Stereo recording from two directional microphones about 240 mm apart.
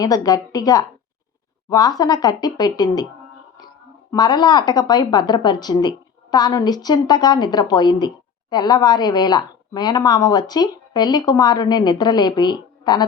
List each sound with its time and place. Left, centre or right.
0.0 s a woman's voice: centre
4.1 s a woman's voice: centre